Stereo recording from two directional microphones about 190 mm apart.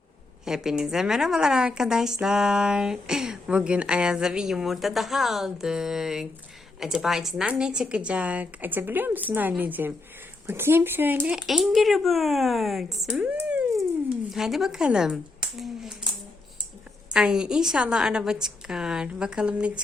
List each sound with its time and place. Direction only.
0.4 s a woman's voice: 5° right (ahead or behind)
17.2 s a woman's voice: 5° right (ahead or behind)